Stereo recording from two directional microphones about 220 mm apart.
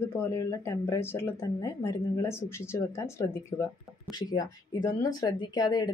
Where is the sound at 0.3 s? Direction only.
15° left (ahead or behind).